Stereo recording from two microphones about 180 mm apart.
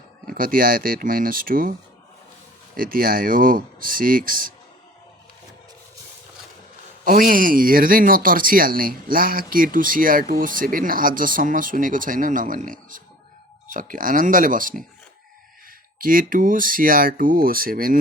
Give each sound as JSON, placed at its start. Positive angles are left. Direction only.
{"t": 0.3, "sound": "speech", "side_deg": -50}
{"t": 2.7, "sound": "speech", "side_deg": -50}
{"t": 7.0, "sound": "speech", "side_deg": -50}
{"t": 16.0, "sound": "speech", "side_deg": -50}